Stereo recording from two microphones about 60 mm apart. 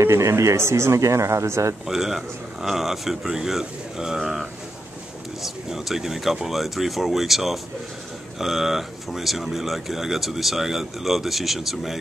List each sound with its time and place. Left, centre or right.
0.0 s speech: right
1.9 s speech: centre